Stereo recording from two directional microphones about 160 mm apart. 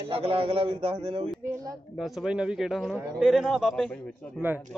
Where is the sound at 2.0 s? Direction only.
Centre (ahead or behind).